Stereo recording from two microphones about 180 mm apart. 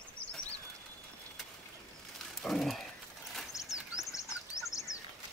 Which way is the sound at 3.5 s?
15° left (ahead or behind).